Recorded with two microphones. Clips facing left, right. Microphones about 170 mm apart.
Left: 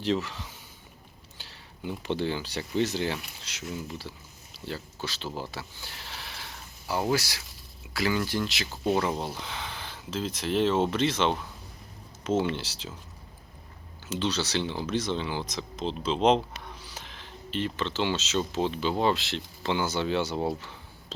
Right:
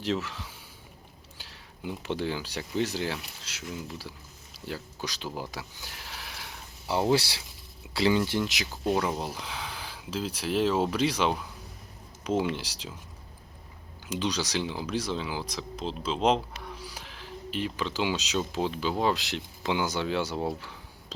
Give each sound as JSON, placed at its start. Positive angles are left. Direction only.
{"t": 0.0, "sound": "speech", "side_deg": -5}
{"t": 1.8, "sound": "speech", "side_deg": -5}
{"t": 5.4, "sound": "a sound", "side_deg": -5}
{"t": 6.8, "sound": "speech", "side_deg": -25}
{"t": 8.6, "sound": "speech", "side_deg": 0}
{"t": 14.1, "sound": "speech", "side_deg": -10}